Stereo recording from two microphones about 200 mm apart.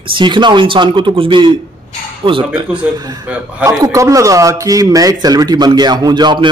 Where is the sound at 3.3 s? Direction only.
5° right (ahead or behind); by 6.5 s 25° right (ahead or behind).